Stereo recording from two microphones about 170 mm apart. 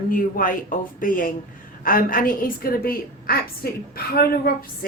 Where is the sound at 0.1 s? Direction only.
55° left (ahead or behind).